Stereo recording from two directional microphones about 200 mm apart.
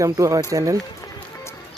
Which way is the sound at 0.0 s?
15° right (ahead or behind).